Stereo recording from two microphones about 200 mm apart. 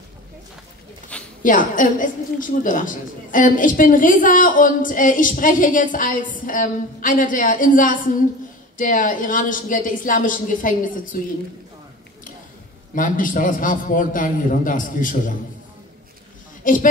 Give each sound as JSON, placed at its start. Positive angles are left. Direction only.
{"t": 1.4, "sound": "a woman's voice", "side_deg": 40}
{"t": 12.9, "sound": "a woman's voice", "side_deg": 40}
{"t": 16.6, "sound": "speech", "side_deg": 40}